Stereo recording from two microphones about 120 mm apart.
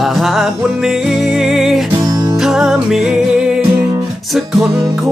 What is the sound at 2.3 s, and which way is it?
Music, 5° right (ahead or behind).